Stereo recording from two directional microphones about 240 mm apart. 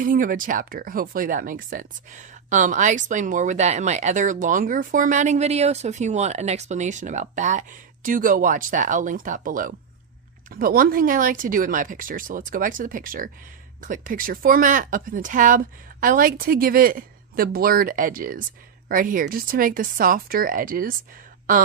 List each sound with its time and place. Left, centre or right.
0.0 s speech: right